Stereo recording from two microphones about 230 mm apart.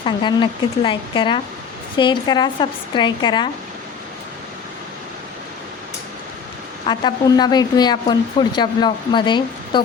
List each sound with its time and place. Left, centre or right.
0.0 s speech: centre
6.8 s speech: centre